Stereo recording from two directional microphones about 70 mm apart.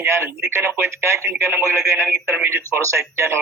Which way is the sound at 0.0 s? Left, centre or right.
Right.